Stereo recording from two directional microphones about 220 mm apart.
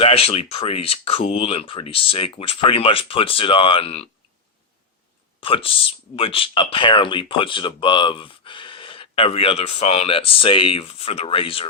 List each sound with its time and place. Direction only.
0.0 s speech: 25° left (ahead or behind)
5.4 s speech: 25° left (ahead or behind)